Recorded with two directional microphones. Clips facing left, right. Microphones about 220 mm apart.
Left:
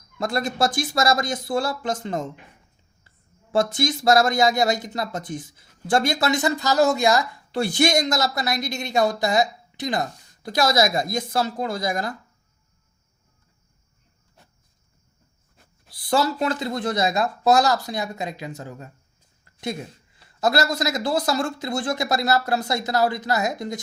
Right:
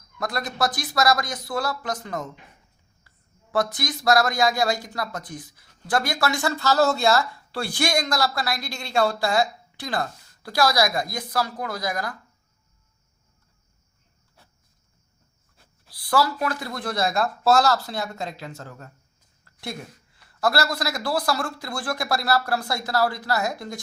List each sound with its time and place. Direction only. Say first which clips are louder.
0.2 s speech: left 3 dB; 25° left (ahead or behind)
3.5 s speech: left 4 dB; 25° left (ahead or behind)
15.9 s speech: left 1 dB; 25° left (ahead or behind)